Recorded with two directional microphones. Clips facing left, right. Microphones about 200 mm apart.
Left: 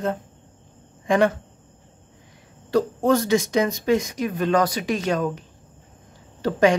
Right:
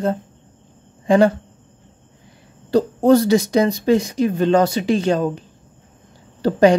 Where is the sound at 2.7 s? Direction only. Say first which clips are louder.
Right 6 dB; 30° right (ahead or behind).